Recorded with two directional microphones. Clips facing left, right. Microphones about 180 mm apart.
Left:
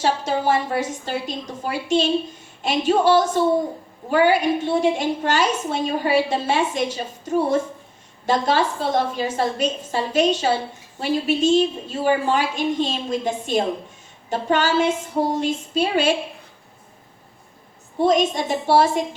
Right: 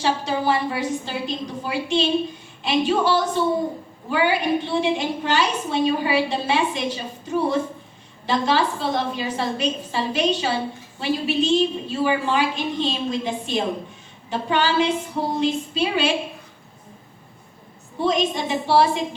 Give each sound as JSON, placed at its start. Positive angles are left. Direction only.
{"t": 0.0, "sound": "a woman's voice", "side_deg": 45}
{"t": 18.0, "sound": "a woman's voice", "side_deg": 45}